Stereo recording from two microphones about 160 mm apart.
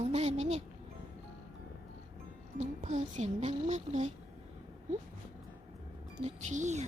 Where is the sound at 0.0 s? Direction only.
45° right (ahead or behind).